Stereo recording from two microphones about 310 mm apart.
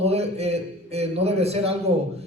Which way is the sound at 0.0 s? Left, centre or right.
Centre.